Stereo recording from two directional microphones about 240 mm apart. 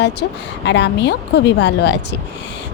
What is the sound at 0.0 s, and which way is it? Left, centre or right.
Speech, left.